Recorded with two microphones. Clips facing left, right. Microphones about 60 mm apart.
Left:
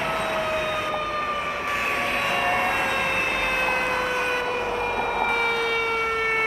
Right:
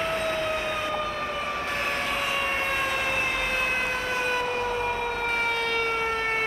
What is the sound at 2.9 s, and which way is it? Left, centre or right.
Emergency vehicle, left.